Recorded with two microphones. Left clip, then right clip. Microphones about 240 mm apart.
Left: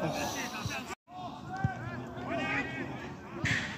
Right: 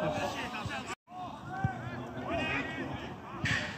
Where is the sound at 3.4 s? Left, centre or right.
Centre.